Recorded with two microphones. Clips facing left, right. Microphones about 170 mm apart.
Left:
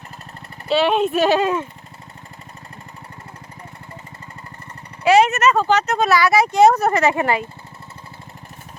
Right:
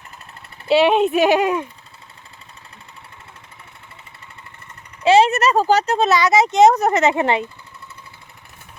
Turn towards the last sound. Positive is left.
turn(degrees=-25)  # may be behind; listen again after turning